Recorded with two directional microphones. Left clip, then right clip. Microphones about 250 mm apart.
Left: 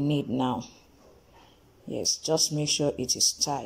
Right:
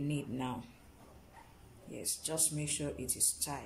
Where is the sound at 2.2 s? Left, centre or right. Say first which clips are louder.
Left 10 dB; left.